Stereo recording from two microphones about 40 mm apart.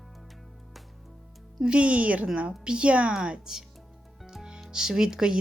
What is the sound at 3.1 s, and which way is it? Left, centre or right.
Speech, centre.